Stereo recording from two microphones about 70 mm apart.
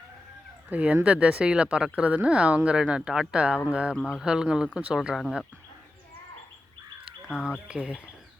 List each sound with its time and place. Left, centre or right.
0.7 s speech: centre
7.3 s speech: centre
7.7 s speech: centre